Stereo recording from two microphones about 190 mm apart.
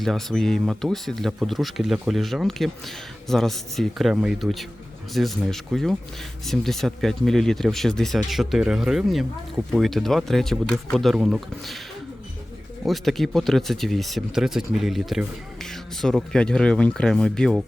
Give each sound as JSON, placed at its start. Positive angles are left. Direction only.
{"t": 0.0, "sound": "speech", "side_deg": 0}
{"t": 12.8, "sound": "speech", "side_deg": 0}